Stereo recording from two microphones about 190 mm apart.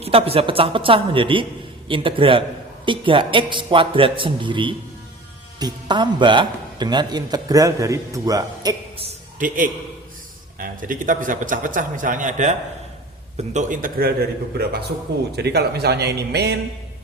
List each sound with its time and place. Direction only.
0.0 s a man's voice: 30° right (ahead or behind)
10.6 s a man's voice: 45° right (ahead or behind); by 16.6 s 60° right (ahead or behind)